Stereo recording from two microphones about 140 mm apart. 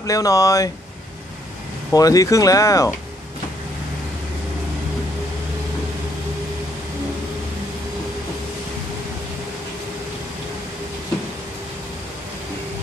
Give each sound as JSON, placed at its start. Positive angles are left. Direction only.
{"t": 0.0, "sound": "speech", "side_deg": 25}
{"t": 1.9, "sound": "speech", "side_deg": 25}